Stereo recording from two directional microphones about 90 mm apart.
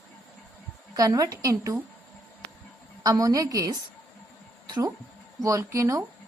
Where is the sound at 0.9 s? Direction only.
40° right (ahead or behind).